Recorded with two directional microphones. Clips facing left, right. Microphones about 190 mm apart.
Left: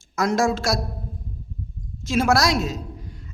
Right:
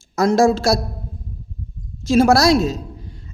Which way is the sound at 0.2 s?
30° right (ahead or behind).